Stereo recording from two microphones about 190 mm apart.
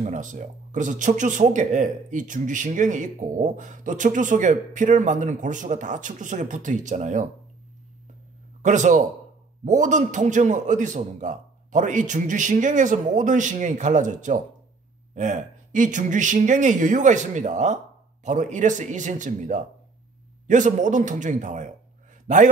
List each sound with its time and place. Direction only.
0.0 s speech: 40° right (ahead or behind)
8.6 s speech: 40° right (ahead or behind)